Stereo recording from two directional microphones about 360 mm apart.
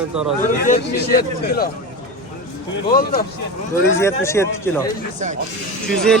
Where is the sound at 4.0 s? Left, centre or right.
Centre.